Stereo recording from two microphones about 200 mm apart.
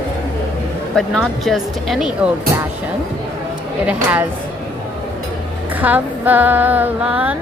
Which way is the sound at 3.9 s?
5° right (ahead or behind).